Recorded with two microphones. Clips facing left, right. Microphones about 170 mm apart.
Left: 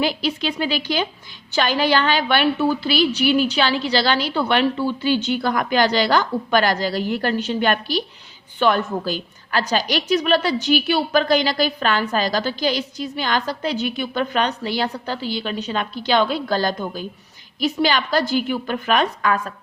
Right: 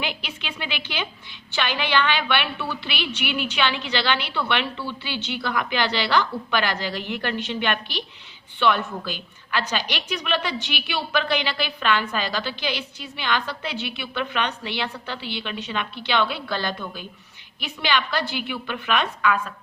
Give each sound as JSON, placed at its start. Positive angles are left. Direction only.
{"t": 0.0, "sound": "a woman's voice", "side_deg": 35}